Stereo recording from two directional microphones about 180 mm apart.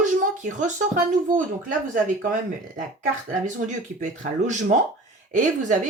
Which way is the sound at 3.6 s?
40° right (ahead or behind).